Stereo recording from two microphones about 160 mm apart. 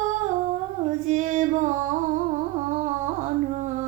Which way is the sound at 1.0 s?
50° right (ahead or behind).